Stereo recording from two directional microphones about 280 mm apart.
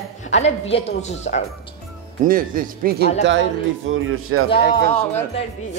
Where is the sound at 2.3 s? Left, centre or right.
Right.